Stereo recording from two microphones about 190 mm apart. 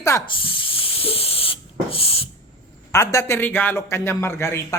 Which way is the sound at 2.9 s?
15° left (ahead or behind).